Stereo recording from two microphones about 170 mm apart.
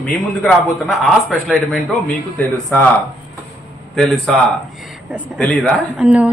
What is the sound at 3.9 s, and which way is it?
Speech, 5° left (ahead or behind).